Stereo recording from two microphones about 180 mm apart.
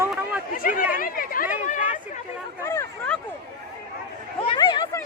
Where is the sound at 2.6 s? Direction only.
15° left (ahead or behind).